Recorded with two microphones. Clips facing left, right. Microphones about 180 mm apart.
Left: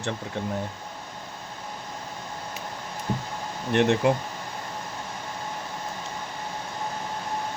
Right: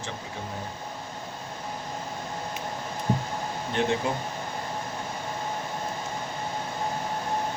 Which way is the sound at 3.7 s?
70° left (ahead or behind).